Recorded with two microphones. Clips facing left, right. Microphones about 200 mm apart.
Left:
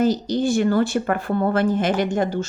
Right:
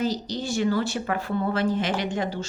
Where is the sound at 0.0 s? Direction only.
50° left (ahead or behind).